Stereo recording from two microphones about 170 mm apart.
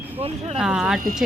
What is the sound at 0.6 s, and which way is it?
Speech, 5° right (ahead or behind).